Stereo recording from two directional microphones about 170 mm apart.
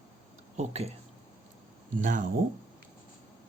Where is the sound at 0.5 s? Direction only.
40° right (ahead or behind).